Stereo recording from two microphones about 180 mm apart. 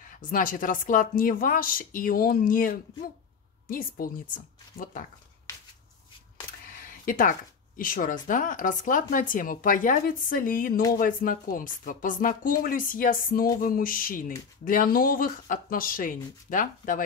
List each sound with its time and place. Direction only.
0.2 s speech: 50° left (ahead or behind)
6.7 s speech: 50° left (ahead or behind)